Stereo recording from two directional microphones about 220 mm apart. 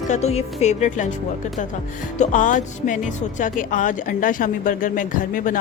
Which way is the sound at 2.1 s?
35° left (ahead or behind).